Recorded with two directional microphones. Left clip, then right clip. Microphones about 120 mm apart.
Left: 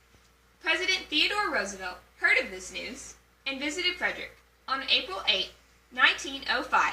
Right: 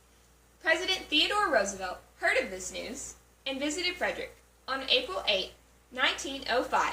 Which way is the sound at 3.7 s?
20° right (ahead or behind).